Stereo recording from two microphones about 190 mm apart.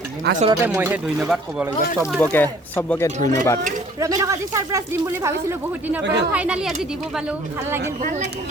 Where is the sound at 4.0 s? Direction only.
15° right (ahead or behind).